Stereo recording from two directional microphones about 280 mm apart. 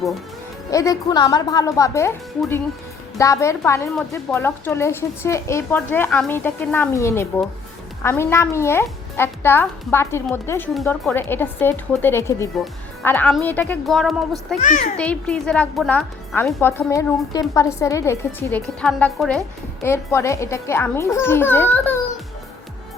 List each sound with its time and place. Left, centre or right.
0.7 s a child's voice: centre
3.2 s a child's voice: centre
14.6 s a child's voice: left
14.9 s a child's voice: centre